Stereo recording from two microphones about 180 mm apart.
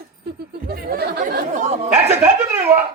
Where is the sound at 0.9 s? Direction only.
55° right (ahead or behind).